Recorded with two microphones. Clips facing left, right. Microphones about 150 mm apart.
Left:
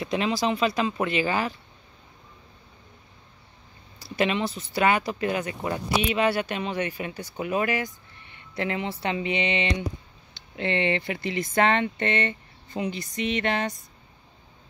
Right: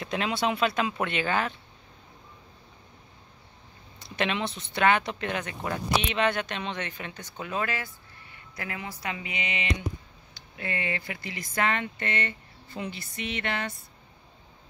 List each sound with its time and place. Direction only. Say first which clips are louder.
0.0 s speech: left 3 dB; centre (ahead or behind)
4.0 s speech: left 4 dB; 5° left (ahead or behind); by 13.7 s 20° left (ahead or behind)